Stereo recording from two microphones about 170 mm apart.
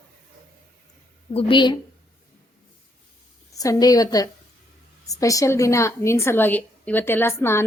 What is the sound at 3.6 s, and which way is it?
A woman's voice, 20° left (ahead or behind).